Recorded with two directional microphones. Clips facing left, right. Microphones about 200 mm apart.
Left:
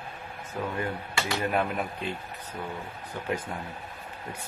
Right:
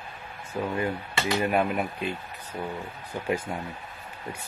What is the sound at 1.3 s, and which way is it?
Speech, 15° right (ahead or behind).